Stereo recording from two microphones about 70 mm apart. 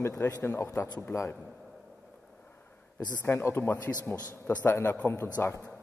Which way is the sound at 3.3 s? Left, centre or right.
Left.